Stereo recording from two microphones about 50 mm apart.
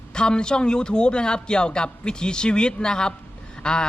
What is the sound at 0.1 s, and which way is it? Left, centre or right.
A man's voice, centre.